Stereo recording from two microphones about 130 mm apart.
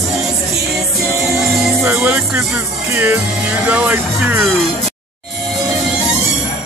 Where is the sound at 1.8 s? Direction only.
15° right (ahead or behind).